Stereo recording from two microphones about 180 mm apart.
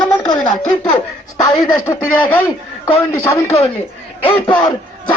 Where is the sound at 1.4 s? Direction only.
20° left (ahead or behind).